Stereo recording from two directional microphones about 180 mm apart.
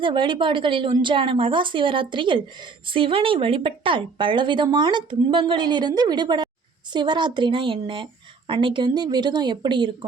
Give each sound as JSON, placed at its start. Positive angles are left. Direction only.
{"t": 0.0, "sound": "speech", "side_deg": -25}